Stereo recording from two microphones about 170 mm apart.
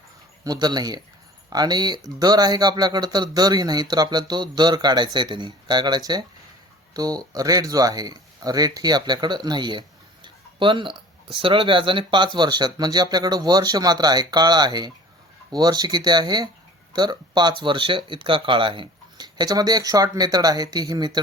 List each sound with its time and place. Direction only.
0.4 s speech: 25° right (ahead or behind)